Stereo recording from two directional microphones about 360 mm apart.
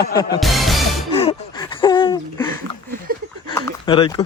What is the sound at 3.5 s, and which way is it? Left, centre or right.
Speech, centre.